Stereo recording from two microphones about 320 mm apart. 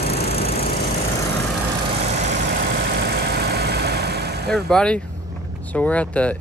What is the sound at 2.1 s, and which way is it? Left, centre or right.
Vehicle, right.